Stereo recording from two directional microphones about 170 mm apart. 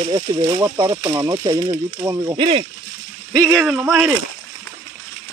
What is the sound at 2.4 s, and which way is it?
Speech, 35° right (ahead or behind).